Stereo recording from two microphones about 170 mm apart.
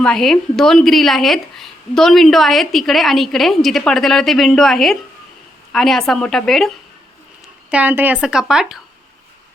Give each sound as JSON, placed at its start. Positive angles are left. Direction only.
{"t": 0.0, "sound": "a woman's voice", "side_deg": 5}
{"t": 7.7, "sound": "a woman's voice", "side_deg": -10}